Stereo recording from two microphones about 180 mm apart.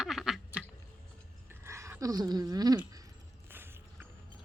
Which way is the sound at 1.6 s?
15° right (ahead or behind).